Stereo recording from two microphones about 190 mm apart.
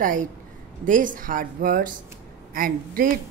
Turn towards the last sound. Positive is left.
turn(degrees=-50)  # may be behind; listen again after turning